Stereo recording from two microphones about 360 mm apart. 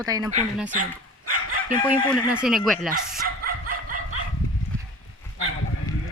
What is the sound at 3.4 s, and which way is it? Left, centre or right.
Dog, right.